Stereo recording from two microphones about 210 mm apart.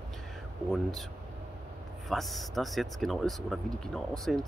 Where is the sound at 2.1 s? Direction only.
Centre (ahead or behind).